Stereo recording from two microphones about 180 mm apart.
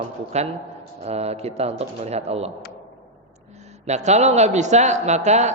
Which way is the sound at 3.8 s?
40° right (ahead or behind).